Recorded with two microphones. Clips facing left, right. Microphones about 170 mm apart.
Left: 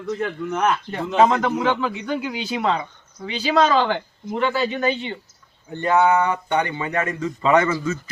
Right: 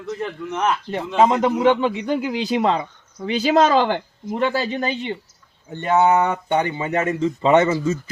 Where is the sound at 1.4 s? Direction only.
30° right (ahead or behind).